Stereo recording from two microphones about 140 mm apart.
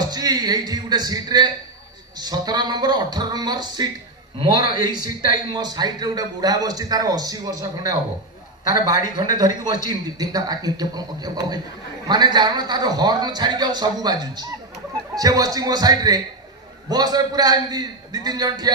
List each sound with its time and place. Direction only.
0.0 s a man's voice: 30° right (ahead or behind)
5.5 s a man's voice: 30° right (ahead or behind)